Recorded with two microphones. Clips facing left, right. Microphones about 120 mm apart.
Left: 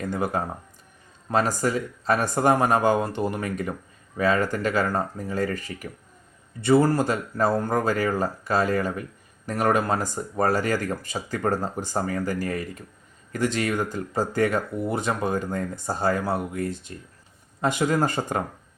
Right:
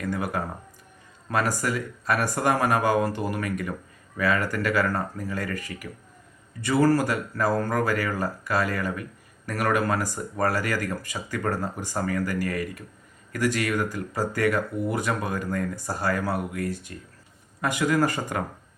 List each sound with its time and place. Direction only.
0.0 s speech: 25° left (ahead or behind)